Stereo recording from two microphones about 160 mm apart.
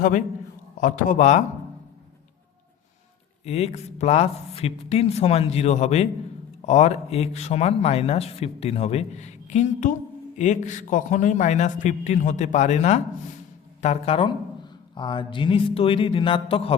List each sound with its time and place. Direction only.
0.8 s a man's voice: 55° left (ahead or behind)
3.4 s a man's voice: 40° left (ahead or behind)